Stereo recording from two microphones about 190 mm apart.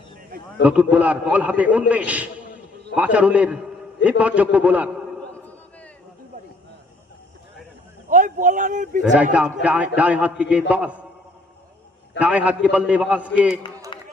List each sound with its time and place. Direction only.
0.6 s a man's voice: 5° right (ahead or behind)
8.1 s speech: 40° right (ahead or behind)
9.3 s a man's voice: 5° right (ahead or behind)
12.2 s a man's voice: 5° right (ahead or behind)